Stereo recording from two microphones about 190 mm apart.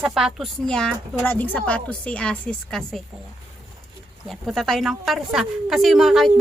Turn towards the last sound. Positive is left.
turn(degrees=0)  # may be behind; listen again after turning